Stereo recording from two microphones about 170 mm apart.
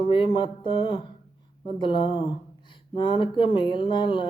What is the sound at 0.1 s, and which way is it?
Music, 30° left (ahead or behind).